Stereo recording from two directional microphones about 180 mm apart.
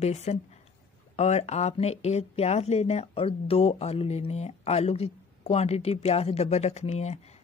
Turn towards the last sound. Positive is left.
turn(degrees=35)  # may be behind; listen again after turning